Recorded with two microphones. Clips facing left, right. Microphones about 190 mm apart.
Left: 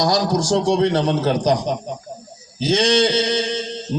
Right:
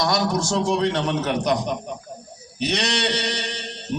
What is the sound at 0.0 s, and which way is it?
A man's voice, 35° left (ahead or behind).